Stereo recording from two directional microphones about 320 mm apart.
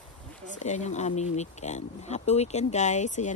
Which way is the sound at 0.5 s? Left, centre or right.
Left.